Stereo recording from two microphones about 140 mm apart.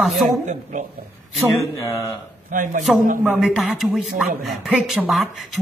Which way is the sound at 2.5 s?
70° right (ahead or behind).